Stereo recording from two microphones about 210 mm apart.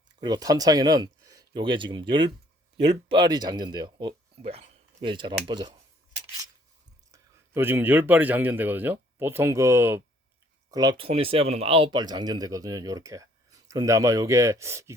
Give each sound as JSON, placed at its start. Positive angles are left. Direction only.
{"t": 0.2, "sound": "speech", "side_deg": -20}
{"t": 7.1, "sound": "a man's voice", "side_deg": -10}